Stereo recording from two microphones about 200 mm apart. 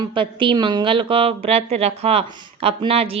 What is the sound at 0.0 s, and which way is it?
A woman's voice, 25° right (ahead or behind).